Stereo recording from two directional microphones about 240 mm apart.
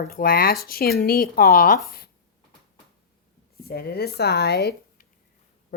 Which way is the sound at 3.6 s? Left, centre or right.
Left.